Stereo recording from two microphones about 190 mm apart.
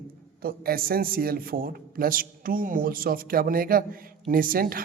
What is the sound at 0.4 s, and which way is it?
A man's voice, 50° right (ahead or behind).